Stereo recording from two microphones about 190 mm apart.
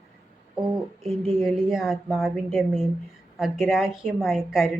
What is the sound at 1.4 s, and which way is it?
Speech, centre (ahead or behind).